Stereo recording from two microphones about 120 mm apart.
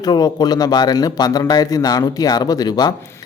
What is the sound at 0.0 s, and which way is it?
Speech, 35° left (ahead or behind).